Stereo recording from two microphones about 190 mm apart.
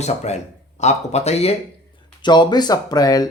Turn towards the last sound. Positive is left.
turn(degrees=20)  # may be behind; listen again after turning